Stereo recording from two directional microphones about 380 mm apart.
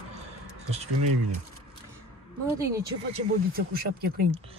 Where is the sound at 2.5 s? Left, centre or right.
Centre.